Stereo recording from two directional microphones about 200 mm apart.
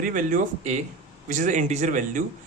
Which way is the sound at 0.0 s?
40° right (ahead or behind).